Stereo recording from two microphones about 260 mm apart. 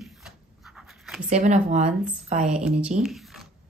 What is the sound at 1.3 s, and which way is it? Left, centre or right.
Speech, right.